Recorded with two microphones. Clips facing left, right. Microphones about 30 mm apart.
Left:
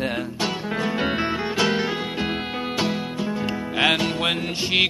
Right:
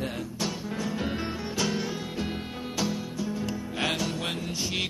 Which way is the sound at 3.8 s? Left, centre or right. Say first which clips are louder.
Left 9 dB; left.